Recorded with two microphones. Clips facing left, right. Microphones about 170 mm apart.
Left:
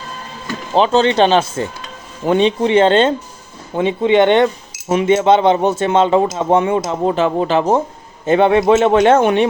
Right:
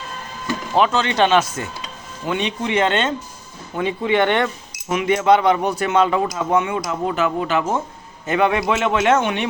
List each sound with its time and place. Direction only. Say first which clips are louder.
0.7 s a man's voice: left 6 dB; 30° left (ahead or behind)